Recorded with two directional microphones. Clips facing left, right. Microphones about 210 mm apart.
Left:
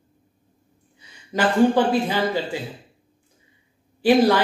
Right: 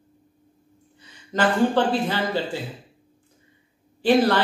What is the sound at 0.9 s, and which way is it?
Speech, 10° left (ahead or behind).